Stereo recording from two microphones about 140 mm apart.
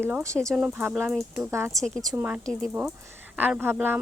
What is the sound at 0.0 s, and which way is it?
Speech, 20° right (ahead or behind).